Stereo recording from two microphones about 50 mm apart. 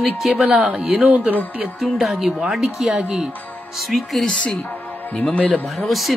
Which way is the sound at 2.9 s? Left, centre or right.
Right.